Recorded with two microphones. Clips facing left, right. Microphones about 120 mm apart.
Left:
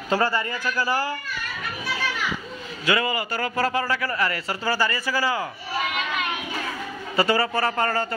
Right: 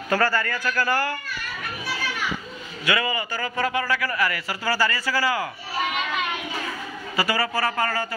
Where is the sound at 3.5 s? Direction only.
35° left (ahead or behind); by 5.5 s 20° left (ahead or behind).